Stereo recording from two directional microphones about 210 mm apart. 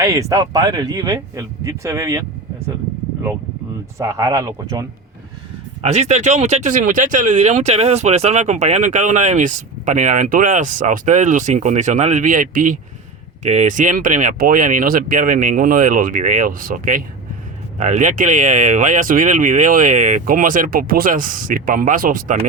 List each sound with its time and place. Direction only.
0.0 s speech: 15° right (ahead or behind)
3.9 s speech: 15° right (ahead or behind)
5.8 s speech: 30° right (ahead or behind)